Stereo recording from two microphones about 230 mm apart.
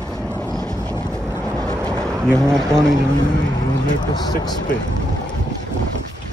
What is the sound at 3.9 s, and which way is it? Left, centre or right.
Speech, centre.